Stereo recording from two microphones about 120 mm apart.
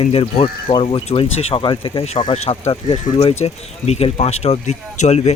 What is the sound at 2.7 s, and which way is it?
Speech, 50° left (ahead or behind).